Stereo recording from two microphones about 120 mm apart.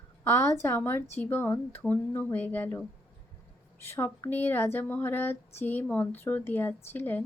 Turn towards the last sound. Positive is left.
turn(degrees=15)  # may be behind; listen again after turning